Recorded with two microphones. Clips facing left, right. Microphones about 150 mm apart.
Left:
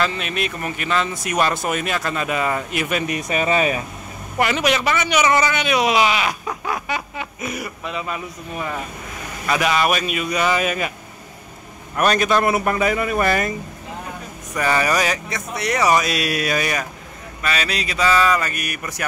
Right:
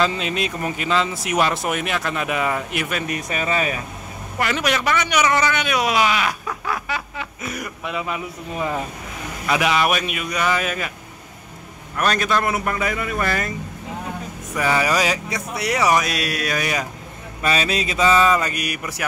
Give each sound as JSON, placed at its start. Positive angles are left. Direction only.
{"t": 0.0, "sound": "speech", "side_deg": -20}
{"t": 1.1, "sound": "speech", "side_deg": -5}
{"t": 3.3, "sound": "speech", "side_deg": 20}
{"t": 4.4, "sound": "a man's voice", "side_deg": 10}
{"t": 7.8, "sound": "speech", "side_deg": -10}
{"t": 9.5, "sound": "speech", "side_deg": -5}
{"t": 10.5, "sound": "a man's voice", "side_deg": 10}
{"t": 12.0, "sound": "speech", "side_deg": 15}
{"t": 14.5, "sound": "speech", "side_deg": -5}
{"t": 17.4, "sound": "speech", "side_deg": -25}